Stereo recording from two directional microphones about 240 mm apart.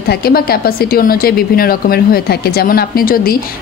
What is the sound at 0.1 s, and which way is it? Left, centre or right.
A woman's voice, left.